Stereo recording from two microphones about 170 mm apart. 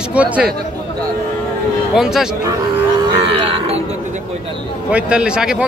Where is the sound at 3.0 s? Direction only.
30° right (ahead or behind).